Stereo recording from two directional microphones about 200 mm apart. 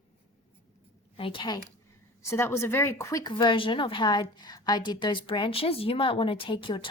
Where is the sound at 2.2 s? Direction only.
10° left (ahead or behind).